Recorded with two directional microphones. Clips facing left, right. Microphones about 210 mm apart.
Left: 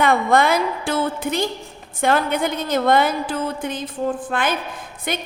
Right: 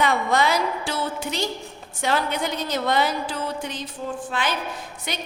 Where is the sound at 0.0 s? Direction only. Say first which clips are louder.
Left 4 dB; 55° left (ahead or behind).